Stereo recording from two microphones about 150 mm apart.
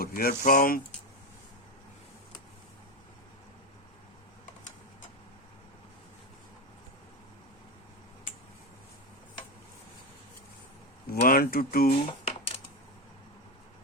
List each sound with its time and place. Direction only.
0.0 s speech: 80° left
11.1 s speech: 75° left (ahead or behind)